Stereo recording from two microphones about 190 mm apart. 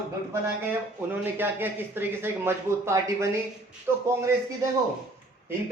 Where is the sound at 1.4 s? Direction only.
10° right (ahead or behind).